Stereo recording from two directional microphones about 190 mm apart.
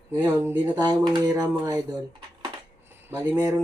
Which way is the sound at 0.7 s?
20° right (ahead or behind).